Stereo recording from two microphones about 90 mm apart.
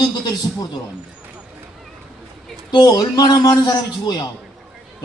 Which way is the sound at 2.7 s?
50° left (ahead or behind).